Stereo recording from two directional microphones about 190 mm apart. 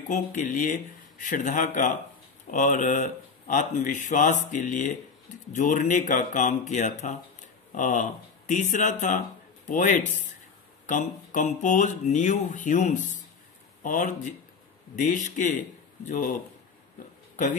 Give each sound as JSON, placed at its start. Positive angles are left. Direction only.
{"t": 0.1, "sound": "speech", "side_deg": 40}